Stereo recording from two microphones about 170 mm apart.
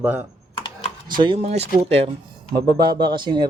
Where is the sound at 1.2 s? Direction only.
35° right (ahead or behind).